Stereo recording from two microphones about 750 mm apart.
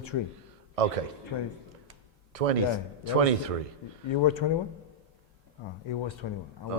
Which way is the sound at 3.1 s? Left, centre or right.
Right.